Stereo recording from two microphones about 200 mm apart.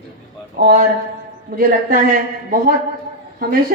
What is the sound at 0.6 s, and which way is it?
Speech, 50° right (ahead or behind).